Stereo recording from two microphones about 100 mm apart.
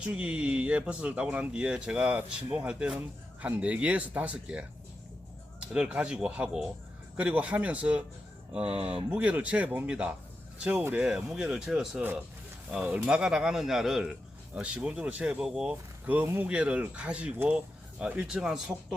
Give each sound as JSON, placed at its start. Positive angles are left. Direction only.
{"t": 0.0, "sound": "speech", "side_deg": -10}
{"t": 9.1, "sound": "speech", "side_deg": -15}
{"t": 15.7, "sound": "speech", "side_deg": -20}